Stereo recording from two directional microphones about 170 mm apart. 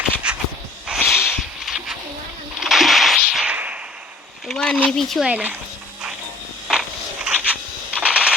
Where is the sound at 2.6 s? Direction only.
Centre (ahead or behind).